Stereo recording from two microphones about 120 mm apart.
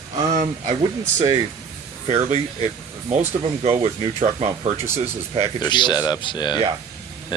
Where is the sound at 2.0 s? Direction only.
60° right (ahead or behind).